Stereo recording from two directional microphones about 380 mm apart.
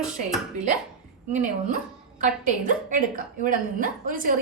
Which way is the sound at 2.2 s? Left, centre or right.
Centre.